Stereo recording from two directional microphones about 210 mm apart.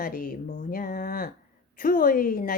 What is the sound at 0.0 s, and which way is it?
Speech, 40° left (ahead or behind).